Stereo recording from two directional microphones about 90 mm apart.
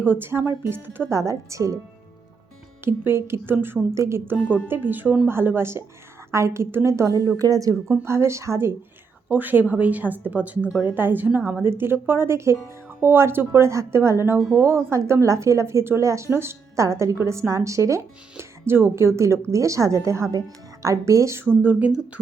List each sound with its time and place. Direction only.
0.1 s speech: 25° right (ahead or behind)
1.1 s speech: 35° right (ahead or behind)
2.8 s speech: 25° right (ahead or behind)
4.7 s speech: 20° right (ahead or behind)
9.3 s speech: 20° right (ahead or behind)